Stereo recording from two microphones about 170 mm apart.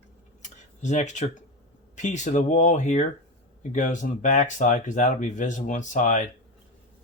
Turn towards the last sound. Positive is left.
turn(degrees=45)  # may be behind; listen again after turning